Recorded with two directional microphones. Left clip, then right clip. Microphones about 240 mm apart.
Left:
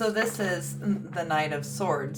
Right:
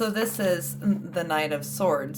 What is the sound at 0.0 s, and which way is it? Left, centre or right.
A woman's voice, right.